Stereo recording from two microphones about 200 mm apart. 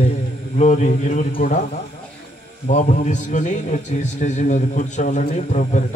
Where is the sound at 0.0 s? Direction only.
35° left (ahead or behind).